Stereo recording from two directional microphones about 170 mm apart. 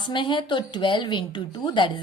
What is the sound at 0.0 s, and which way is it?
A woman's voice, 30° left (ahead or behind).